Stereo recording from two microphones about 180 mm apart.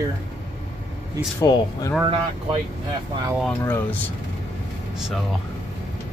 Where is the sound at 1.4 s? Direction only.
20° left (ahead or behind).